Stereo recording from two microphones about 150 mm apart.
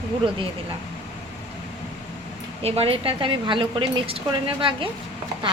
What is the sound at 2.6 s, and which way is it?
A woman's voice, 40° right (ahead or behind).